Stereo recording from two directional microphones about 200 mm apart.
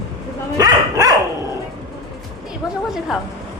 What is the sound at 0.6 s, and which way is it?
Dog, 20° right (ahead or behind).